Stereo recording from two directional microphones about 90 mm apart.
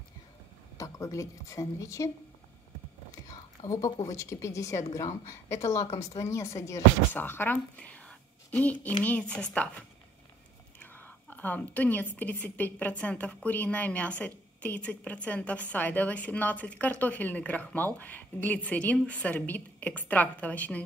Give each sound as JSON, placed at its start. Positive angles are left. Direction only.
{"t": 0.7, "sound": "a woman's voice", "side_deg": 35}
{"t": 3.3, "sound": "a woman's voice", "side_deg": 40}
{"t": 7.2, "sound": "a woman's voice", "side_deg": 20}
{"t": 10.8, "sound": "whispering", "side_deg": 20}
{"t": 12.2, "sound": "a woman's voice", "side_deg": 20}